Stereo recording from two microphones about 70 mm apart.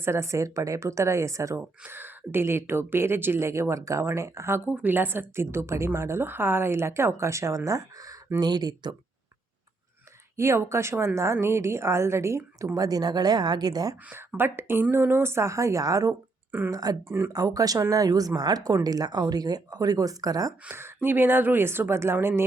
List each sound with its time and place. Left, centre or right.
0.0 s speech: right
1.9 s a woman's voice: right
4.6 s a woman's voice: right
8.4 s speech: right
10.3 s a woman's voice: right
12.7 s speech: right
14.3 s a woman's voice: right
16.0 s a sound: right
16.7 s speech: right
17.0 s a woman's voice: right
17.3 s speech: right
20.7 s a woman's voice: right